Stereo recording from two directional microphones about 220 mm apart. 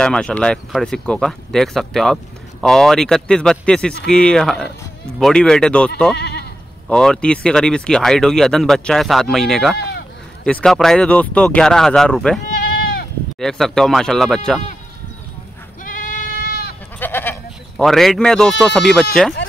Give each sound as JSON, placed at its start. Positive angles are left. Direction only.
{"t": 0.0, "sound": "speech", "side_deg": 5}
{"t": 6.1, "sound": "goat", "side_deg": 50}
{"t": 6.9, "sound": "speech", "side_deg": 5}
{"t": 9.8, "sound": "sheep", "side_deg": 45}
{"t": 10.4, "sound": "speech", "side_deg": 5}
{"t": 12.6, "sound": "goat", "side_deg": 45}
{"t": 13.4, "sound": "speech", "side_deg": 0}
{"t": 15.8, "sound": "goat", "side_deg": 40}
{"t": 17.0, "sound": "speech", "side_deg": 10}